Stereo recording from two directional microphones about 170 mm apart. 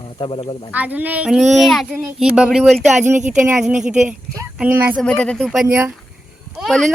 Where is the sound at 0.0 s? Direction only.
30° left (ahead or behind).